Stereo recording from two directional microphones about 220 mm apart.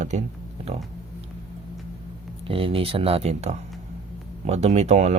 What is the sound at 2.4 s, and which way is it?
Speech, 25° right (ahead or behind).